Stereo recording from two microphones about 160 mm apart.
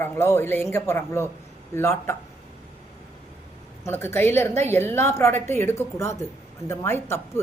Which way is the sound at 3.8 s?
15° left (ahead or behind).